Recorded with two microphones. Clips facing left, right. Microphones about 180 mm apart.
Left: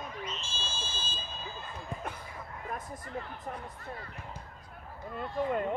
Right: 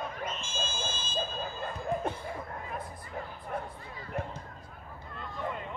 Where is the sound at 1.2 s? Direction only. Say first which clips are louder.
Right 8 dB; 55° right (ahead or behind).